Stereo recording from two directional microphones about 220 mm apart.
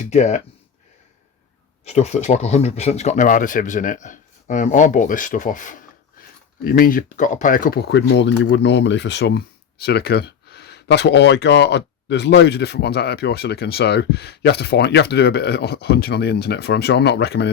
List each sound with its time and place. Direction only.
0.1 s speech: 30° left (ahead or behind)
1.8 s speech: 30° left (ahead or behind); by 17.5 s 50° left (ahead or behind)